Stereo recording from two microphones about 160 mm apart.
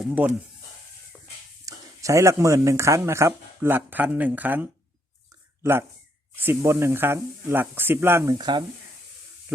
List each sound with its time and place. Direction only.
0.0 s speech: 10° right (ahead or behind)
1.1 s a sound: centre (ahead or behind)
1.6 s speech: 20° right (ahead or behind)
6.3 s speech: 15° right (ahead or behind)